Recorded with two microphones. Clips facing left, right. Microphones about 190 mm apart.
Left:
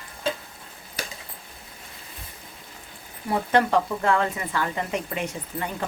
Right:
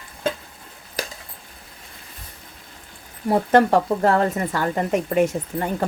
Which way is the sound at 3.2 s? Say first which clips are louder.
Right 6 dB; 40° right (ahead or behind).